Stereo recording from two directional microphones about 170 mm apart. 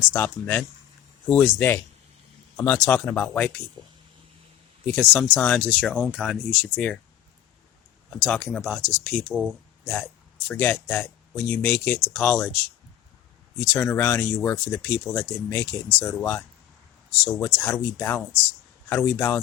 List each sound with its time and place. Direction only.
0.1 s speech: 10° left (ahead or behind)
4.9 s speech: 5° left (ahead or behind)
8.1 s speech: 5° left (ahead or behind)
9.3 s speech: 5° right (ahead or behind)
9.8 s speech: 10° left (ahead or behind)
13.7 s speech: 15° left (ahead or behind)